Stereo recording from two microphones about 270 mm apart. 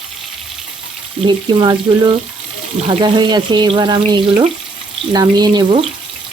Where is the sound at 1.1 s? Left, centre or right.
Centre.